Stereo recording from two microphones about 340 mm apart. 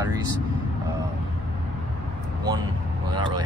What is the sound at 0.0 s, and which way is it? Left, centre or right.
Vehicle, centre.